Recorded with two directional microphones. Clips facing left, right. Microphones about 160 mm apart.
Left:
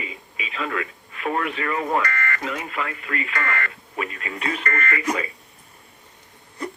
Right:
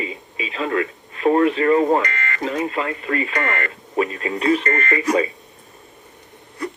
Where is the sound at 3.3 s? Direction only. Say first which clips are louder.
Right 4 dB; 20° right (ahead or behind).